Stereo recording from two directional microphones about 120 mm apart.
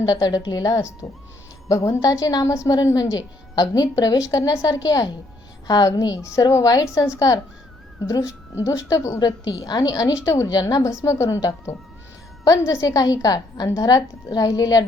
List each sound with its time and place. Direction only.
0.0 s a woman's voice: 30° left (ahead or behind)